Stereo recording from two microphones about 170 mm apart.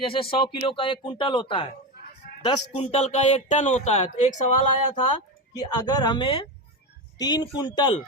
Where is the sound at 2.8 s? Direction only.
40° left (ahead or behind).